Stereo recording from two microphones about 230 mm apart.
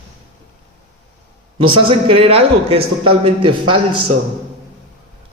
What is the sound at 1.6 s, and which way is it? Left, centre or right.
A man's voice, right.